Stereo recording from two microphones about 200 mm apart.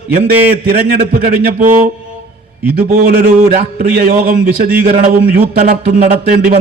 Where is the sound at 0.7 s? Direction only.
50° right (ahead or behind).